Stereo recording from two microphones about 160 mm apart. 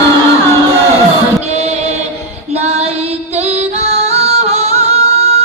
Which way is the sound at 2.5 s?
40° right (ahead or behind).